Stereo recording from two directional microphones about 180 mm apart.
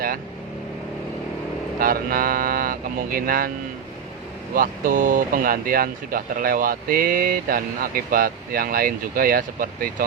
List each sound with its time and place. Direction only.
1.8 s speech: 50° right (ahead or behind)
4.5 s speech: 50° right (ahead or behind)